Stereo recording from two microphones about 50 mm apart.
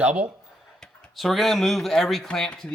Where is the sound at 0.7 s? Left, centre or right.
Centre.